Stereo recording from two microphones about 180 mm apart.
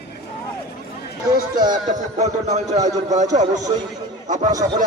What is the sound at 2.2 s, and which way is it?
Speech, 40° right (ahead or behind).